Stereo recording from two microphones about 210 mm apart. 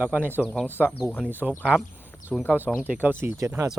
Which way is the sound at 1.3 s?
10° right (ahead or behind).